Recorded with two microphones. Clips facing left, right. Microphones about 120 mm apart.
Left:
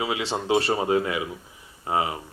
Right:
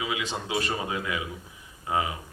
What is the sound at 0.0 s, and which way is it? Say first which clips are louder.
Speech: left 4 dB; 35° left (ahead or behind).